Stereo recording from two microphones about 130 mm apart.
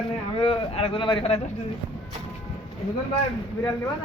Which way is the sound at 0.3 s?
45° left (ahead or behind).